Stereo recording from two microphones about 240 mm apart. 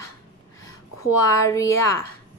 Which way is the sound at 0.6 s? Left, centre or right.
Centre.